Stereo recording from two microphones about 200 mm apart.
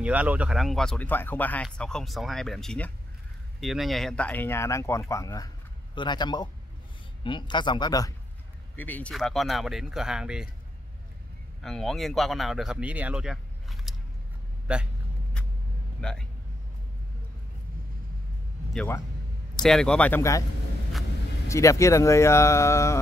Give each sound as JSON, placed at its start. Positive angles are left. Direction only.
{"t": 0.0, "sound": "speech", "side_deg": -5}
{"t": 8.7, "sound": "speech", "side_deg": 10}
{"t": 11.6, "sound": "speech", "side_deg": 0}
{"t": 16.0, "sound": "speech", "side_deg": 5}
{"t": 18.7, "sound": "speech", "side_deg": 5}
{"t": 21.5, "sound": "speech", "side_deg": 15}